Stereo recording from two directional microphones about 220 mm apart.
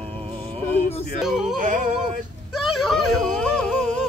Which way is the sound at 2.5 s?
Centre (ahead or behind).